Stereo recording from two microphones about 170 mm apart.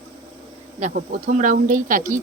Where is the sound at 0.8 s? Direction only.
50° right (ahead or behind).